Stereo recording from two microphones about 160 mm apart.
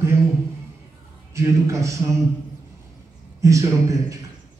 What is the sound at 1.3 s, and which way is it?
Speech, 20° right (ahead or behind).